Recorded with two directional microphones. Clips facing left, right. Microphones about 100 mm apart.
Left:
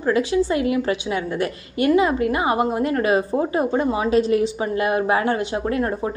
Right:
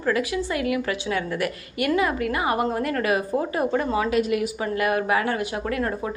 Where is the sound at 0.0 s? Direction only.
25° left (ahead or behind).